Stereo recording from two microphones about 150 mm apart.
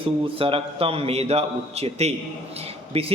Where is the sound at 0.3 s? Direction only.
40° right (ahead or behind).